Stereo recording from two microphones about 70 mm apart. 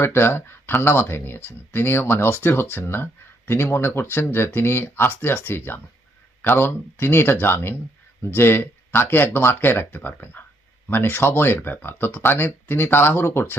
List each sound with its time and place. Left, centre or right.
0.0 s speech: left